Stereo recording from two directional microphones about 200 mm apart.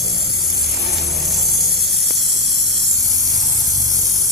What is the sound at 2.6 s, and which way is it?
Hiss, 60° right (ahead or behind).